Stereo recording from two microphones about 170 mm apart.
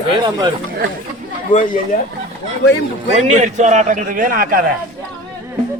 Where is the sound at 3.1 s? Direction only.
45° right (ahead or behind); by 4.7 s 60° right (ahead or behind).